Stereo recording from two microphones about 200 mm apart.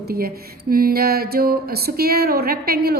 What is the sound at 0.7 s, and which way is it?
A woman's voice, 45° right (ahead or behind).